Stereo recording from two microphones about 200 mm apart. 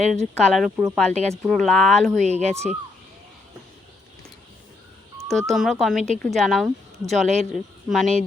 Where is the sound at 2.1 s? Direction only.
35° right (ahead or behind).